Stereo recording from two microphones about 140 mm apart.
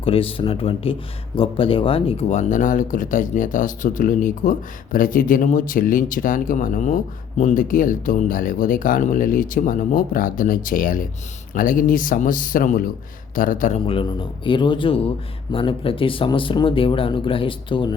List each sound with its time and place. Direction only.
0.0 s speech: 40° left (ahead or behind); by 13.7 s 70° left (ahead or behind)
13.7 s speech: 40° left (ahead or behind)